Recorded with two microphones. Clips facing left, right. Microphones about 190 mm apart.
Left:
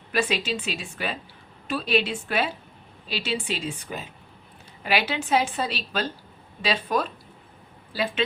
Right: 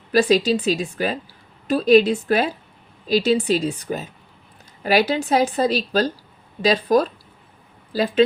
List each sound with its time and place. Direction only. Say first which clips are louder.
0.1 s a woman's voice: right 9 dB; 35° right (ahead or behind)